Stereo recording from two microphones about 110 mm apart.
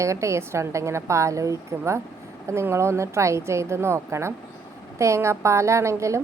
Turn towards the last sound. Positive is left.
turn(degrees=-25)  # may be behind; listen again after turning